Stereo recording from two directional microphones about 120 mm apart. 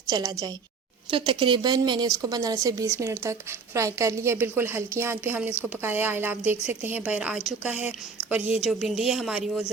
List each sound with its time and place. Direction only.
0.1 s speech: 30° right (ahead or behind)
1.1 s a woman's voice: 45° right (ahead or behind); by 8.6 s 10° right (ahead or behind)
8.6 s speech: centre (ahead or behind)